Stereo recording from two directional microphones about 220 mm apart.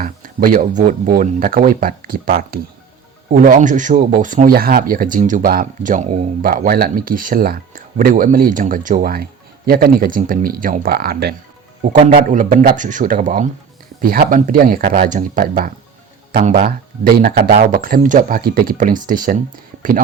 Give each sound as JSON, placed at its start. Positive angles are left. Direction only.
{"t": 0.0, "sound": "speech", "side_deg": -40}
{"t": 11.8, "sound": "speech", "side_deg": -30}